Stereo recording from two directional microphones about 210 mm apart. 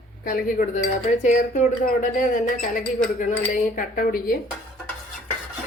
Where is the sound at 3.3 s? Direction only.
40° left (ahead or behind).